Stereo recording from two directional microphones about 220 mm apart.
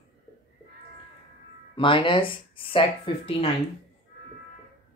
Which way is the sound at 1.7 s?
25° left (ahead or behind).